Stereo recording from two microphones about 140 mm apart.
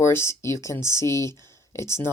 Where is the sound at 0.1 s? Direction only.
20° left (ahead or behind).